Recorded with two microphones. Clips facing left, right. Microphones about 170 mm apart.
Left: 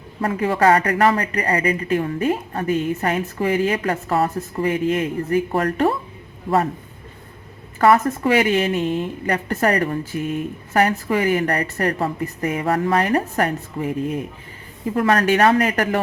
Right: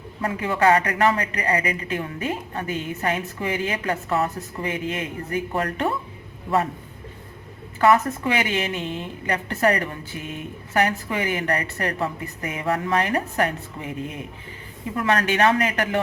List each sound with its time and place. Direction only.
0.3 s speech: 35° left (ahead or behind)
7.8 s speech: 35° left (ahead or behind)